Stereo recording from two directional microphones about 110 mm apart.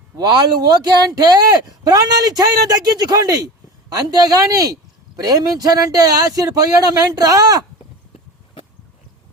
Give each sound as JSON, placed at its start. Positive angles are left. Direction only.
{"t": 0.2, "sound": "speech", "side_deg": -40}